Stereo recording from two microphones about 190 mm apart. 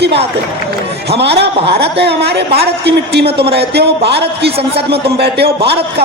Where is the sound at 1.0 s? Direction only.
60° right (ahead or behind).